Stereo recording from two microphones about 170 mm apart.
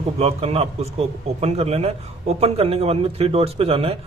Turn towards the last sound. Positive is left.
turn(degrees=-35)  # may be behind; listen again after turning